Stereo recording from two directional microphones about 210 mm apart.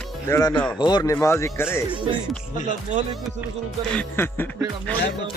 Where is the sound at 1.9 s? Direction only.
25° right (ahead or behind).